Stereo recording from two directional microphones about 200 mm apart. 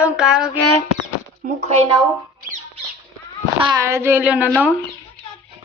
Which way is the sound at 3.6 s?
15° right (ahead or behind).